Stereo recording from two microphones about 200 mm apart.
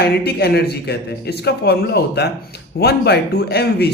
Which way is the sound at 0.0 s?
55° left (ahead or behind).